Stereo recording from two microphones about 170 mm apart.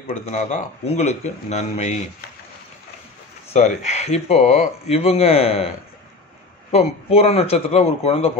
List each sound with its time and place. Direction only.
0.0 s speech: 45° left (ahead or behind)
3.5 s speech: 40° left (ahead or behind)
6.7 s speech: 35° left (ahead or behind)